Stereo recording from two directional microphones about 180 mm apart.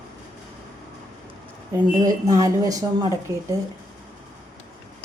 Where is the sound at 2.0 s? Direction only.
20° right (ahead or behind).